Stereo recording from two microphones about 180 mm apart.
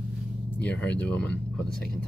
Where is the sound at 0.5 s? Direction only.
10° left (ahead or behind).